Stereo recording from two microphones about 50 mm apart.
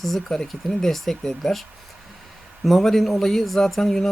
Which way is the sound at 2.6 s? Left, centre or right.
Centre.